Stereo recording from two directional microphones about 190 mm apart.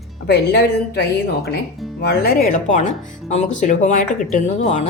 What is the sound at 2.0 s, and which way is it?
Speech, 55° left (ahead or behind).